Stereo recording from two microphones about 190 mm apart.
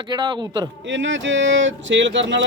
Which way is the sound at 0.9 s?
75° right (ahead or behind).